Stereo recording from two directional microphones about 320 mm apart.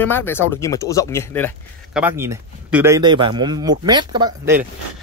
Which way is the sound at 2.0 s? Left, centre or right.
Centre.